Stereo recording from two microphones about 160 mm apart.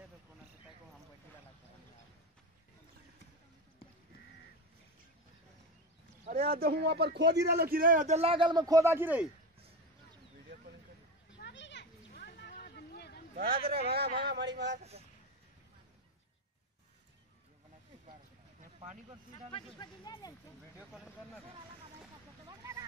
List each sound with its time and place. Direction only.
6.2 s a man's voice: 65° right (ahead or behind); by 9.3 s 10° right (ahead or behind)
11.3 s a sound: 90° left
13.4 s speech: 70° right (ahead or behind)
13.8 s speech: 80° right
19.5 s speech: 25° left (ahead or behind)
22.5 s a sound: 20° right (ahead or behind)